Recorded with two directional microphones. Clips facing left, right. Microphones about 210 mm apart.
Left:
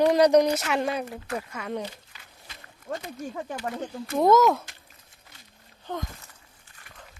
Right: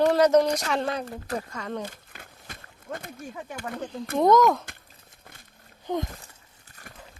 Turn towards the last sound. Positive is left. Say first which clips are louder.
# right 6 dB
turn(degrees=-10)  # may be behind; listen again after turning